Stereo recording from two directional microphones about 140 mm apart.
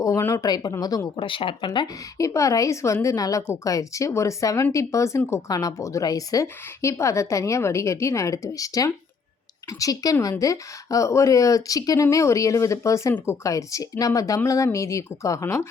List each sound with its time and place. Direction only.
0.0 s speech: 20° left (ahead or behind)